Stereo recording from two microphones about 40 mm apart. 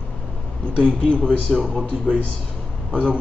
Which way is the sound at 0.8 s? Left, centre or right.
Left.